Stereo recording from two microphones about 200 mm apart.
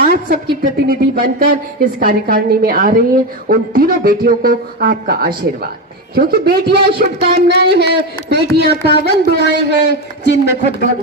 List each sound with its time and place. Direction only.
0.0 s a woman's voice: 45° right (ahead or behind)
9.8 s speech: 60° left (ahead or behind)